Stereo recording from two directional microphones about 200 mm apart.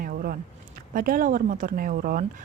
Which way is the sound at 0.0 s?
50° right (ahead or behind).